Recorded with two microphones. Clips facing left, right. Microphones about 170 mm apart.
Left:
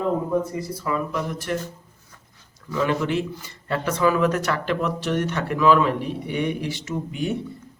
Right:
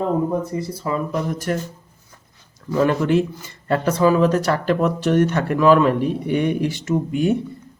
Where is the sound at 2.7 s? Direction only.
45° right (ahead or behind).